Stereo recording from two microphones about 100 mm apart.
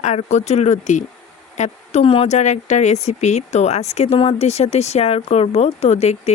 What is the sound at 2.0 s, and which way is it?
Speech, 70° left (ahead or behind).